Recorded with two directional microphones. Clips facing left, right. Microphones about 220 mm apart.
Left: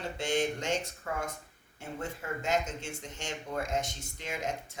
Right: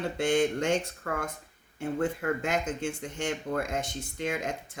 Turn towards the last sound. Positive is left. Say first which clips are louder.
# right 3 dB
turn(degrees=-55)  # may be behind; listen again after turning